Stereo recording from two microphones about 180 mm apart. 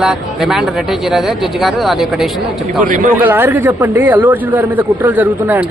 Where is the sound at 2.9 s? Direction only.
50° right (ahead or behind).